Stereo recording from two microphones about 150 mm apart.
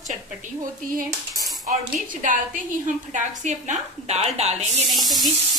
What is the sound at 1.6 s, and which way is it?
A woman's voice, 60° right (ahead or behind).